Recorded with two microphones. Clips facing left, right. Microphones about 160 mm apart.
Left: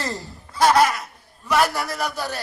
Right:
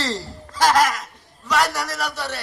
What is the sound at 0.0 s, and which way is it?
Chuckle, 90° right.